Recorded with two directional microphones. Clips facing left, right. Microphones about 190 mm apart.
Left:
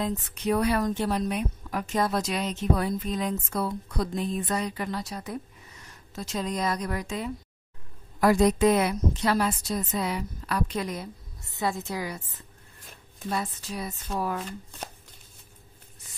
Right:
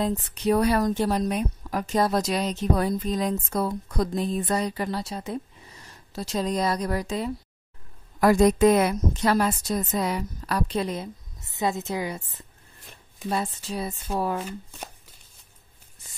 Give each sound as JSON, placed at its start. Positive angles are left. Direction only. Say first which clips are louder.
{"t": 0.0, "sound": "a woman's voice", "louder": "right 4 dB", "side_deg": -35}
{"t": 8.2, "sound": "a woman's voice", "louder": "right 3 dB", "side_deg": -45}
{"t": 13.3, "sound": "speech", "louder": "right 3 dB", "side_deg": -25}
{"t": 14.4, "sound": "speech", "louder": "right 2 dB", "side_deg": -5}